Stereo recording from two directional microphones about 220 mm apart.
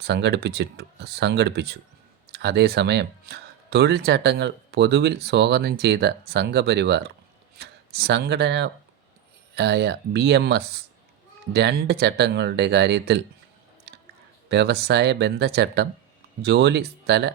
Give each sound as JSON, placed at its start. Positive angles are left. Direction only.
{"t": 0.0, "sound": "speech", "side_deg": -50}
{"t": 13.9, "sound": "a sound", "side_deg": -50}
{"t": 14.5, "sound": "speech", "side_deg": -50}